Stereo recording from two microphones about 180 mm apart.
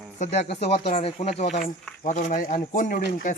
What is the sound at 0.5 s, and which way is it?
Speech, 35° left (ahead or behind).